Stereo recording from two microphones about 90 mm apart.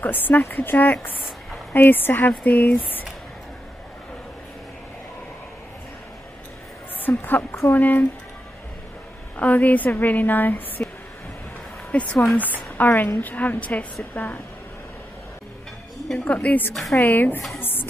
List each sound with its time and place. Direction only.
0.0 s speech: 20° left (ahead or behind)
7.2 s speech: 20° left (ahead or behind)
9.4 s a woman's voice: 15° left (ahead or behind)
16.1 s a woman's voice: 15° left (ahead or behind)
17.6 s music: 25° left (ahead or behind)